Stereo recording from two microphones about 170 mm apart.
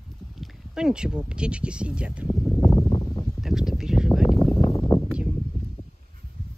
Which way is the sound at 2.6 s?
20° left (ahead or behind).